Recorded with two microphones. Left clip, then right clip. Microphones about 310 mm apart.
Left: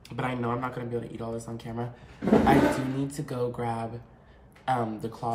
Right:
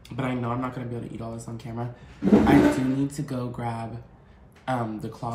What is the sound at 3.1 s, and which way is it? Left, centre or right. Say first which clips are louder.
Speech: left 2 dB; centre.